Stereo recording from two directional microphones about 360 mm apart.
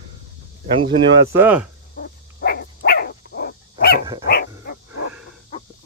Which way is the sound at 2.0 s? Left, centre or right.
Left.